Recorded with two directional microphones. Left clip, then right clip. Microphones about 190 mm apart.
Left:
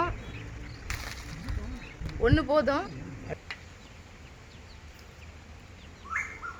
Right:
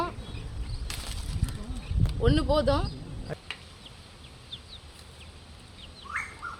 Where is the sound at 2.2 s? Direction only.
Centre (ahead or behind).